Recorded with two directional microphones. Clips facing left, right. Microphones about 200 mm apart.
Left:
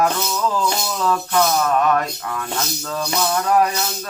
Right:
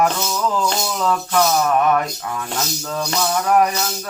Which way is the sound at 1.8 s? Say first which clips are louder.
Right 1 dB; 15° right (ahead or behind).